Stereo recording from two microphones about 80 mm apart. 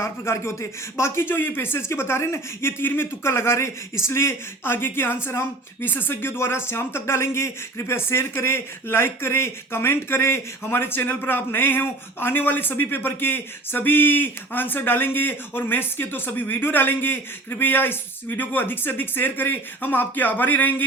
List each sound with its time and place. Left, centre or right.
0.0 s speech: left